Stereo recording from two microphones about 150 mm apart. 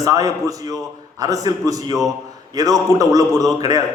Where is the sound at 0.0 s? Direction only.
25° right (ahead or behind).